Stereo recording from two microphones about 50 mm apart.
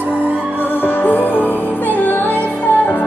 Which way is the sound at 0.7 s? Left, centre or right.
Left.